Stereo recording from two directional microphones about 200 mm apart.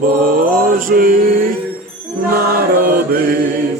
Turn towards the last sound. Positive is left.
turn(degrees=-45)  # may be behind; listen again after turning